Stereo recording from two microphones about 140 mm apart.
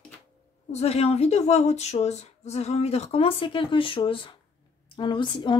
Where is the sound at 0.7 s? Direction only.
50° left (ahead or behind).